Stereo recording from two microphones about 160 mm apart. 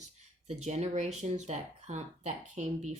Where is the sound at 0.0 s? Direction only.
45° right (ahead or behind).